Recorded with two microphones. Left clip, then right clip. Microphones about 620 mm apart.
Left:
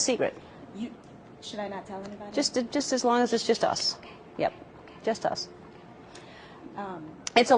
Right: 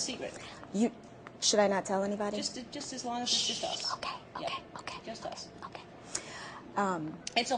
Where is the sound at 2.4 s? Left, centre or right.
Left.